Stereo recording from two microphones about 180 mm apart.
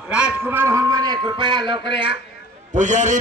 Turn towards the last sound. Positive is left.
turn(degrees=-40)  # may be behind; listen again after turning